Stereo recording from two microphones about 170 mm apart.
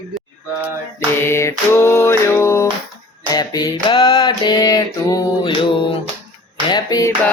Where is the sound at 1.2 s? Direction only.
15° left (ahead or behind).